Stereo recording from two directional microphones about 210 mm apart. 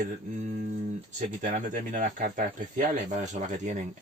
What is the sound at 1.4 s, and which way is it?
Speech, 40° right (ahead or behind).